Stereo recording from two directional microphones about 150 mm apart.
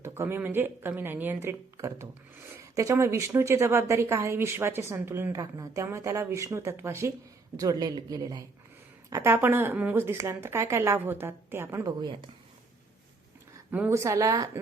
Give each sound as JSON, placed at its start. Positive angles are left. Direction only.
{"t": 0.0, "sound": "speech", "side_deg": -15}
{"t": 13.7, "sound": "speech", "side_deg": -15}